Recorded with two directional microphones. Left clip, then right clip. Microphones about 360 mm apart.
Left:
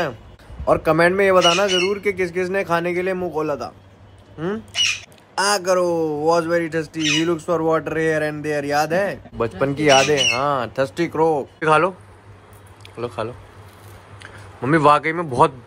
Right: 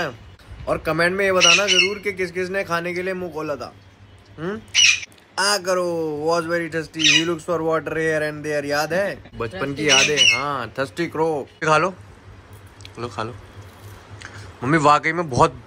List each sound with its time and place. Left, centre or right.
0.7 s speech: centre
5.3 s a man's voice: centre